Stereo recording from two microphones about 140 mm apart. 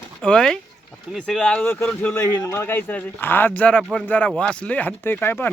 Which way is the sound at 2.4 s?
20° left (ahead or behind).